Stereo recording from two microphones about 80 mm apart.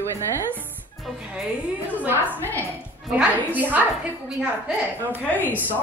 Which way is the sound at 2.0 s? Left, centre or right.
Right.